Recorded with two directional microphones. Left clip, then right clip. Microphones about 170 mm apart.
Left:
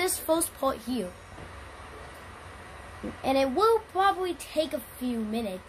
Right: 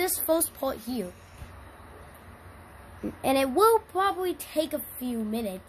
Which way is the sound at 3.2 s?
50° right (ahead or behind).